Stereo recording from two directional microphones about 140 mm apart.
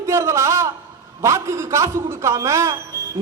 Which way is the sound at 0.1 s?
20° right (ahead or behind).